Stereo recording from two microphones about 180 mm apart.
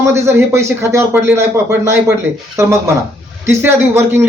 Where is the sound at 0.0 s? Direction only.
15° right (ahead or behind).